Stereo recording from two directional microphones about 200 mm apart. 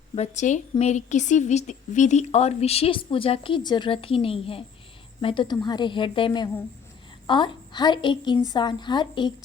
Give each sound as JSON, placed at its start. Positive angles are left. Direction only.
{"t": 0.2, "sound": "a woman's voice", "side_deg": 35}